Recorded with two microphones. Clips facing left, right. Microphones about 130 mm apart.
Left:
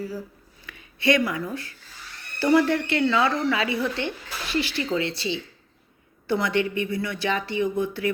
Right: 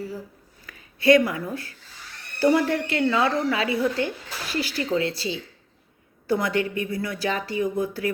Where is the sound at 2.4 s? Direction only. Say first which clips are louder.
Even; 45° right (ahead or behind).